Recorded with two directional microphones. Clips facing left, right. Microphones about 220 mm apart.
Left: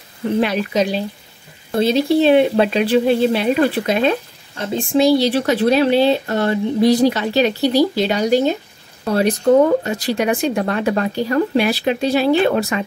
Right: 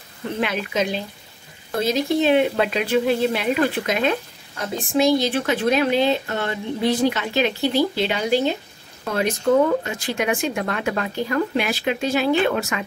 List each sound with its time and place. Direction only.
0.4 s speech: 35° left (ahead or behind)